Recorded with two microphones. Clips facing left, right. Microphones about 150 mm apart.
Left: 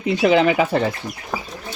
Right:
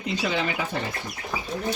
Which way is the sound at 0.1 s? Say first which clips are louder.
Left 11 dB; 65° left (ahead or behind).